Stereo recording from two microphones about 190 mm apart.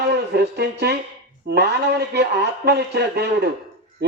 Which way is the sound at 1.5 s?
60° right (ahead or behind).